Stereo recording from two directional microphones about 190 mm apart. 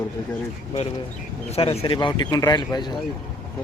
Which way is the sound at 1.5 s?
30° left (ahead or behind).